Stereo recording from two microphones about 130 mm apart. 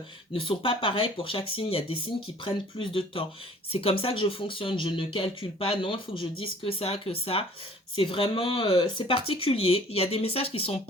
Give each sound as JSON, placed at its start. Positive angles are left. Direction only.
{"t": 0.3, "sound": "speech", "side_deg": 45}